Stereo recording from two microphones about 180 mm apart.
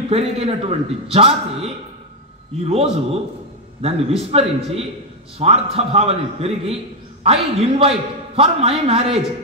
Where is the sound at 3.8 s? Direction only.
35° right (ahead or behind).